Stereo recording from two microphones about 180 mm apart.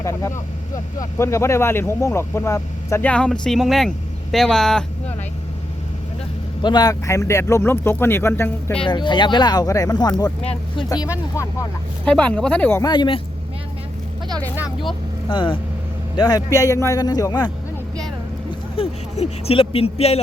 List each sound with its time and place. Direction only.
0.0 s speech: 15° left (ahead or behind)
6.6 s speech: 25° left (ahead or behind)
8.8 s speech: 25° left (ahead or behind)
10.4 s speech: 35° left (ahead or behind)
10.8 s speech: 20° left (ahead or behind)
12.0 s speech: 5° left (ahead or behind)
12.8 s speech: 25° left (ahead or behind)
15.3 s speech: 25° left (ahead or behind)
18.8 s a sound: 35° left (ahead or behind)